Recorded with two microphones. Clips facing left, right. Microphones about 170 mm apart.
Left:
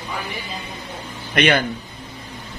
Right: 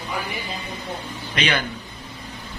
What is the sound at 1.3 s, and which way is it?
Speech, 55° left (ahead or behind).